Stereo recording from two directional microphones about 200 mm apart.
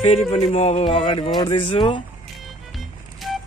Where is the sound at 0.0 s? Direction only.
30° left (ahead or behind).